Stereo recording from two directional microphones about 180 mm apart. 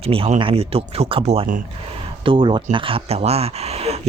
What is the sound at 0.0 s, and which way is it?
Speech, 30° right (ahead or behind).